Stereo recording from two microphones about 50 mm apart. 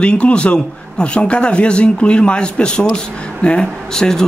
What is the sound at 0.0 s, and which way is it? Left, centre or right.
Speech, left.